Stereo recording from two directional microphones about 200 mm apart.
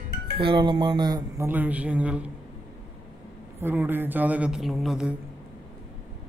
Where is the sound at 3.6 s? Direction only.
10° right (ahead or behind).